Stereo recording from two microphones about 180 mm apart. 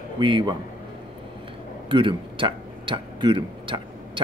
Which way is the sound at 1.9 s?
25° right (ahead or behind).